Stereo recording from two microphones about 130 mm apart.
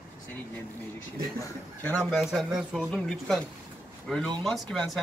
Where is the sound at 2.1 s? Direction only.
Centre (ahead or behind).